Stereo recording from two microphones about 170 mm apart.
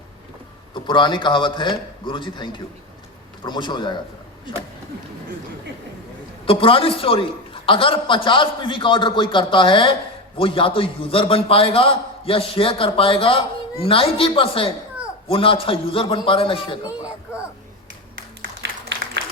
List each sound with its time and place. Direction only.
0.7 s a man's voice: 30° left (ahead or behind)
6.4 s a man's voice: 30° left (ahead or behind)
18.6 s a sound: 90° right